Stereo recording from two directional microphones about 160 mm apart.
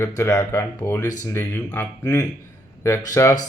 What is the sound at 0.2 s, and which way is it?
Speech, 20° left (ahead or behind).